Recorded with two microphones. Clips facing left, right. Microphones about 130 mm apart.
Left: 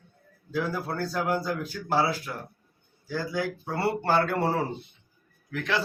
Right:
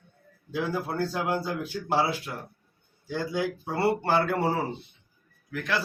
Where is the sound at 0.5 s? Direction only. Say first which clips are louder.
Even; 15° right (ahead or behind).